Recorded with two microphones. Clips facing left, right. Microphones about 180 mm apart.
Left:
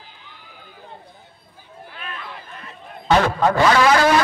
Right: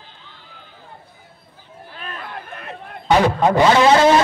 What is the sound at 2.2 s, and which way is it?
Run, 60° right (ahead or behind).